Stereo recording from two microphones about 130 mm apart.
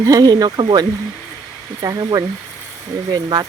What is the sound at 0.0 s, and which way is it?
Speech, 30° right (ahead or behind).